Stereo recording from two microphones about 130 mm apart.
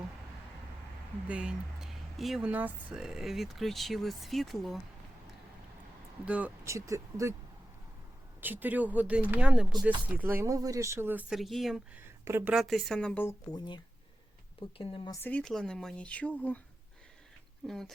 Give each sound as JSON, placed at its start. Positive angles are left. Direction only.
{"t": 1.3, "sound": "speech", "side_deg": -10}
{"t": 2.5, "sound": "speech", "side_deg": -10}
{"t": 6.2, "sound": "speech", "side_deg": -10}
{"t": 6.7, "sound": "speech", "side_deg": -25}
{"t": 8.4, "sound": "speech", "side_deg": -15}
{"t": 11.3, "sound": "speech", "side_deg": 0}
{"t": 11.9, "sound": "speech", "side_deg": -20}
{"t": 12.5, "sound": "speech", "side_deg": 0}
{"t": 13.5, "sound": "speech", "side_deg": 35}
{"t": 15.1, "sound": "speech", "side_deg": 15}
{"t": 17.7, "sound": "speech", "side_deg": 5}